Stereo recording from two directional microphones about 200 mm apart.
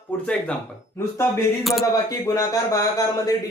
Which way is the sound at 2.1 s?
15° left (ahead or behind).